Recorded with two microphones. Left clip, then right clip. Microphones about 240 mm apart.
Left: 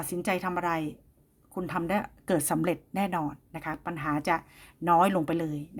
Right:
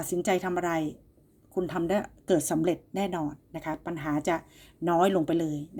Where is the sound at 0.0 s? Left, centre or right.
Left.